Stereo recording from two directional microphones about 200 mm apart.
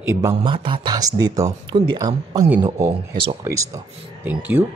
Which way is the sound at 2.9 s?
25° right (ahead or behind).